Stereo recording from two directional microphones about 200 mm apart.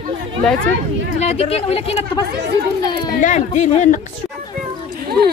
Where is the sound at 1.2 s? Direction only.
30° left (ahead or behind).